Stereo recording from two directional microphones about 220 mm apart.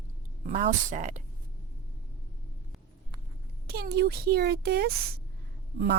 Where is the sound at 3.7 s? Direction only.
45° right (ahead or behind).